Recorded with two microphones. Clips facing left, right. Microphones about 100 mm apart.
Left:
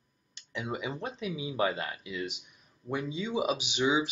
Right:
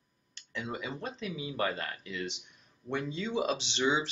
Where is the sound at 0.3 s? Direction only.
20° left (ahead or behind).